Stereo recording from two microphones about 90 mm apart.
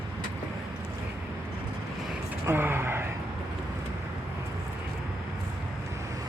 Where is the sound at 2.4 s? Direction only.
25° right (ahead or behind).